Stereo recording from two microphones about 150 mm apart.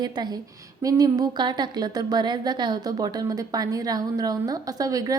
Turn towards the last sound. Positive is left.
turn(degrees=-25)  # may be behind; listen again after turning